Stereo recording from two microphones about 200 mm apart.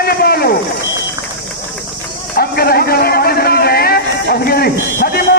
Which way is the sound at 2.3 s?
50° left (ahead or behind).